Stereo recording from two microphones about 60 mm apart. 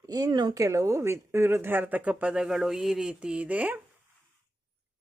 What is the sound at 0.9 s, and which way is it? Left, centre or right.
Speech, right.